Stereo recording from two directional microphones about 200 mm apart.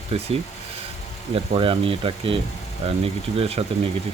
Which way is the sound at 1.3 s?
25° right (ahead or behind).